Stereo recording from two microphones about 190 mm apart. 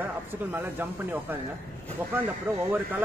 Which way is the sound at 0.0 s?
10° right (ahead or behind).